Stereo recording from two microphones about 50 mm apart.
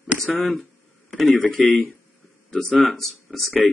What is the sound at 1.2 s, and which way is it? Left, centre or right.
Speech, left.